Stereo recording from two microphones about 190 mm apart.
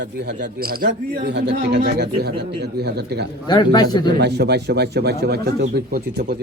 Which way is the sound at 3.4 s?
20° left (ahead or behind).